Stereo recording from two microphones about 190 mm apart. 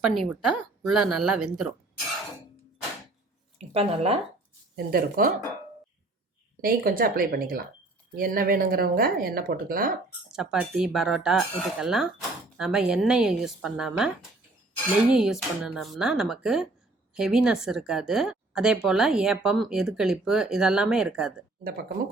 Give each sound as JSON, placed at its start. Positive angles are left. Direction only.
{"t": 0.0, "sound": "speech", "side_deg": 0}
{"t": 3.6, "sound": "speech", "side_deg": -30}
{"t": 4.9, "sound": "speech", "side_deg": -50}
{"t": 6.6, "sound": "speech", "side_deg": -50}
{"t": 10.3, "sound": "speech", "side_deg": -5}
{"t": 15.1, "sound": "speech", "side_deg": -5}